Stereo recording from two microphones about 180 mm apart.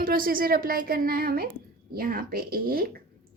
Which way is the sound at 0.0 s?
50° right (ahead or behind).